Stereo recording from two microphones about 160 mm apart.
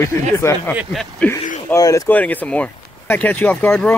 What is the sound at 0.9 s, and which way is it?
Speech, 5° left (ahead or behind).